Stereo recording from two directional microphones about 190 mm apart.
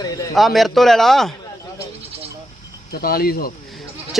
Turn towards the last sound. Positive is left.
turn(degrees=50)  # may be behind; listen again after turning